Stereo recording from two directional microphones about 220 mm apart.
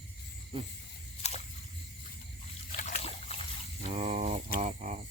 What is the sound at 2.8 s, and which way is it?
Trickle, 30° left (ahead or behind).